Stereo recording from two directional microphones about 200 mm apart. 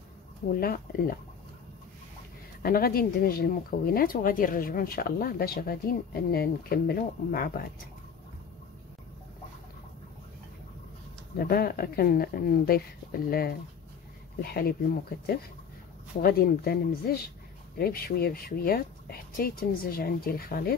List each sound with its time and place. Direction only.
0.6 s speech: 45° left (ahead or behind)
2.6 s speech: 50° left (ahead or behind)
11.3 s speech: 50° left (ahead or behind)